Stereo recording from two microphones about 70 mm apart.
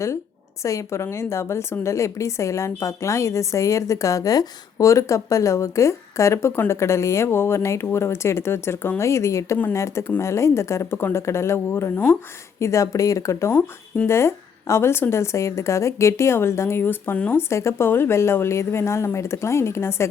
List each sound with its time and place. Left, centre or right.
0.6 s a woman's voice: left
17.3 s a woman's voice: left